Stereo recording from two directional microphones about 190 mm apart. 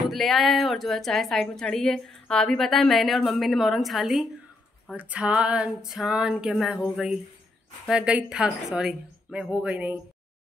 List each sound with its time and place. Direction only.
0.1 s a woman's voice: centre (ahead or behind)